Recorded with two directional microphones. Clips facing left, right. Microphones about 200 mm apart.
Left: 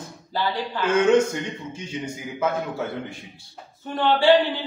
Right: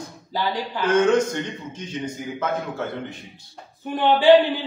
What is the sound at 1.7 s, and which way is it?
A man's voice, 10° left (ahead or behind).